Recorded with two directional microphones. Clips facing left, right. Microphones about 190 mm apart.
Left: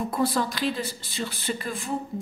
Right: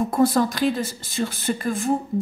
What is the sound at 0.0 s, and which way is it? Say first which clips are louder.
A woman's voice: right 6 dB; 45° right (ahead or behind).